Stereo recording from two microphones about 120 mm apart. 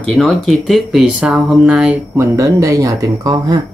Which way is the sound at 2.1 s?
25° right (ahead or behind).